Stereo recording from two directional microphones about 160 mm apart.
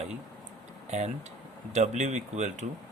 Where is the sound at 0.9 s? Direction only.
45° right (ahead or behind).